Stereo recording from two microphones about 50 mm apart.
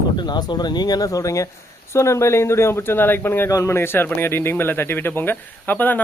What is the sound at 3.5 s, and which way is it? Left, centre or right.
Speech, left.